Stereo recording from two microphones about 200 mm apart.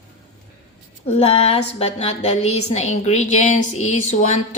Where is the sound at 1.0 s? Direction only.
30° left (ahead or behind).